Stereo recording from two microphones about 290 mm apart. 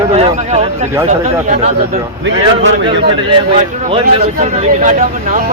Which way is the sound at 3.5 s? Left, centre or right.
Right.